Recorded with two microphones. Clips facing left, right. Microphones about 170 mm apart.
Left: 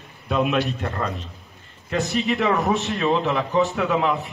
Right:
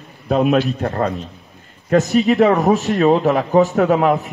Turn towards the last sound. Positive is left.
turn(degrees=-40)  # may be behind; listen again after turning